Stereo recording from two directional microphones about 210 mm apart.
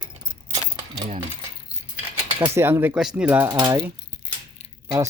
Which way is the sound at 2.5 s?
10° right (ahead or behind).